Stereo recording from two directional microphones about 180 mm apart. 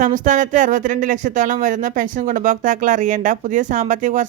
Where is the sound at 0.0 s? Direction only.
45° right (ahead or behind).